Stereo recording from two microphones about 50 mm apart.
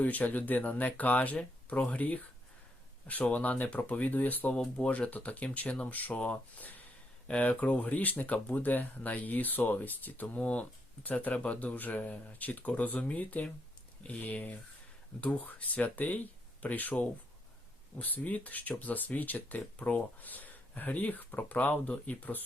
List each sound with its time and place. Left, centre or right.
0.0 s speech: left
4.5 s speech: centre
15.2 s speech: left
15.4 s speech: left